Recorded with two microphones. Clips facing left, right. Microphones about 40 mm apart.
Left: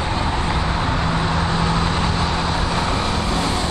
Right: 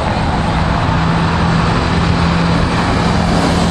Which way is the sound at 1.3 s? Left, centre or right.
Right.